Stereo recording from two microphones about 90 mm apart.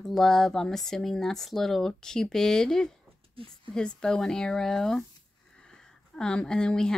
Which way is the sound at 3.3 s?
80° right.